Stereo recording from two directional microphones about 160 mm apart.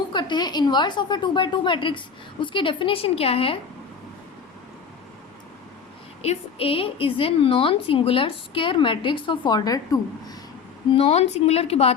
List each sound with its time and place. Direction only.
0.1 s a woman's voice: 30° left (ahead or behind)
6.2 s a woman's voice: 35° left (ahead or behind)
10.9 s a woman's voice: 40° left (ahead or behind)